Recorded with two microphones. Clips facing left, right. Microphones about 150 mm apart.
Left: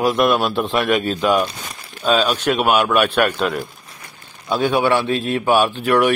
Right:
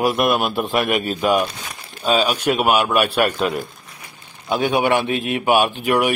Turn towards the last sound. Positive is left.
turn(degrees=-10)  # may be behind; listen again after turning